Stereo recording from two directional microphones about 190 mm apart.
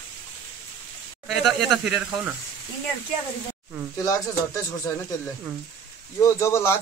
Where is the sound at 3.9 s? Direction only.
15° left (ahead or behind).